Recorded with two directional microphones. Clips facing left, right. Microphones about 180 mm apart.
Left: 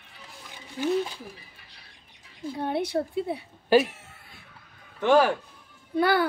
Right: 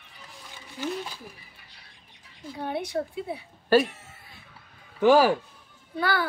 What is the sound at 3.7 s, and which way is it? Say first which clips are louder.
Speech: even; 15° left (ahead or behind).